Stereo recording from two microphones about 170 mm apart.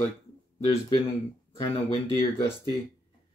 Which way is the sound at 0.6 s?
30° left (ahead or behind).